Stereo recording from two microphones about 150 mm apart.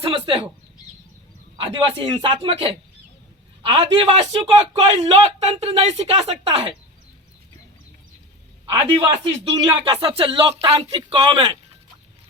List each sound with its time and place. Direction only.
0.0 s a man's voice: 35° right (ahead or behind)
1.5 s a man's voice: 35° right (ahead or behind)
8.7 s a man's voice: 25° right (ahead or behind)
9.2 s a man's voice: 40° right (ahead or behind)